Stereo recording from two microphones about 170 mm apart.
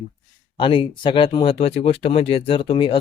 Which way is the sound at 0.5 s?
30° left (ahead or behind).